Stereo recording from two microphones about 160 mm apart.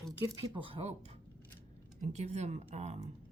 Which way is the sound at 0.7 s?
40° right (ahead or behind).